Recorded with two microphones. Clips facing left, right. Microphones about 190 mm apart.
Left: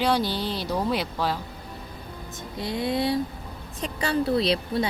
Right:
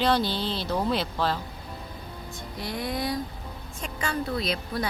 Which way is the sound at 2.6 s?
25° left (ahead or behind).